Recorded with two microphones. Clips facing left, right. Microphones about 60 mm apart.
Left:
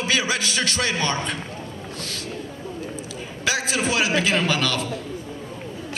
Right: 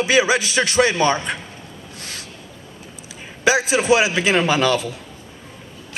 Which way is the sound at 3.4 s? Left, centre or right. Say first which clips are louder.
Right 8 dB; centre.